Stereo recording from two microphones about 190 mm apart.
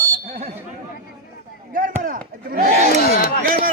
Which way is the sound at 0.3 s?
35° right (ahead or behind).